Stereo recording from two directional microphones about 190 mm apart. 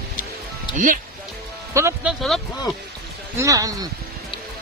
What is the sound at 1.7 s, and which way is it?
Speech, 15° right (ahead or behind).